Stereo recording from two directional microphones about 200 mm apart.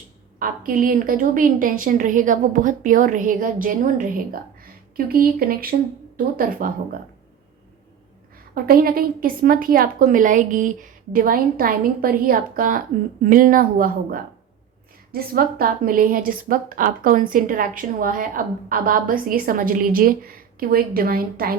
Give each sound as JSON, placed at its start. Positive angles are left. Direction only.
{"t": 0.3, "sound": "a woman's voice", "side_deg": -45}
{"t": 8.5, "sound": "a woman's voice", "side_deg": -50}